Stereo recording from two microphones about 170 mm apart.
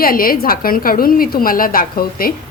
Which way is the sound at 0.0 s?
60° left (ahead or behind).